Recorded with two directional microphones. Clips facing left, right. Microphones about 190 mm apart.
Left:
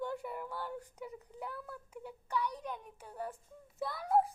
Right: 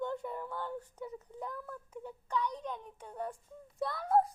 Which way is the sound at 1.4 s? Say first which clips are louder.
Right 1 dB; 10° left (ahead or behind).